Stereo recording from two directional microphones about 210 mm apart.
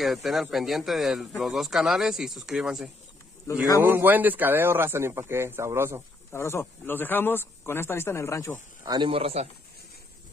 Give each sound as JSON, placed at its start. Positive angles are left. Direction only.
{"t": 0.0, "sound": "speech", "side_deg": 0}
{"t": 6.3, "sound": "speech", "side_deg": 10}
{"t": 8.8, "sound": "a man's voice", "side_deg": -20}